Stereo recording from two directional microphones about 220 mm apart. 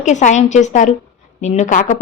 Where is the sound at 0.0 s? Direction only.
35° left (ahead or behind).